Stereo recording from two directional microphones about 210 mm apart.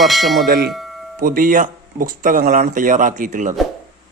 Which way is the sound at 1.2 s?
40° right (ahead or behind).